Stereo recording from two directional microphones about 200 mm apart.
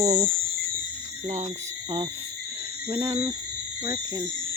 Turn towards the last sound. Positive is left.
turn(degrees=-15)  # may be behind; listen again after turning